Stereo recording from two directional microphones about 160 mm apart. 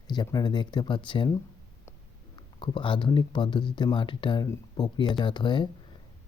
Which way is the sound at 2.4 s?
30° left (ahead or behind).